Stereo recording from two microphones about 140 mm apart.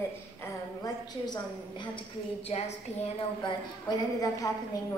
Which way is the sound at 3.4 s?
30° left (ahead or behind).